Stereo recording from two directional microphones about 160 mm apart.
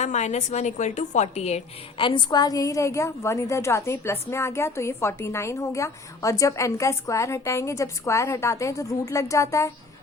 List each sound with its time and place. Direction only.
0.0 s a woman's voice: 45° left (ahead or behind); by 9.7 s 20° left (ahead or behind)